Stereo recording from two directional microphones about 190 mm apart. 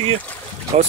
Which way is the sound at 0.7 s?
35° right (ahead or behind).